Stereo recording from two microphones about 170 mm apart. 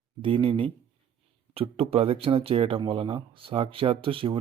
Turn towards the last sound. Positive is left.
turn(degrees=-30)  # may be behind; listen again after turning